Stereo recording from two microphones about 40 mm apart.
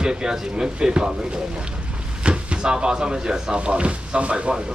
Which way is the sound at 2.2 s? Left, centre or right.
Right.